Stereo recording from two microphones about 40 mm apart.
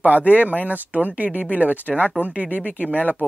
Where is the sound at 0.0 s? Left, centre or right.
Right.